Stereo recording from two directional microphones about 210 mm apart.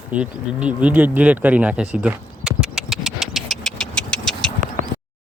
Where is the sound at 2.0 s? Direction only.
5° right (ahead or behind).